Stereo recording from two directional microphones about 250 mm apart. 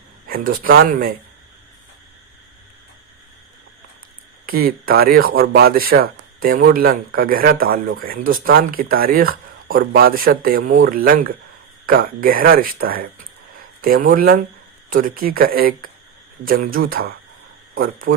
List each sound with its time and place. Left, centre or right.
0.3 s speech: right
4.4 s speech: right